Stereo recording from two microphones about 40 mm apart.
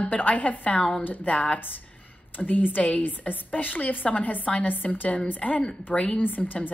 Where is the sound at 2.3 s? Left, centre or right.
Left.